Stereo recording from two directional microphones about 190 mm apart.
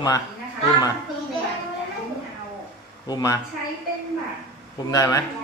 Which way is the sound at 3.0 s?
20° left (ahead or behind).